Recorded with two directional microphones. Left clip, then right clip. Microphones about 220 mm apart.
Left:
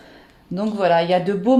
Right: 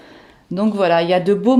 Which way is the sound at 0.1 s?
45° right (ahead or behind).